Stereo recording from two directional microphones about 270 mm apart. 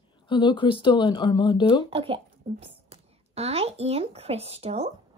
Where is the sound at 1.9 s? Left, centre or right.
Right.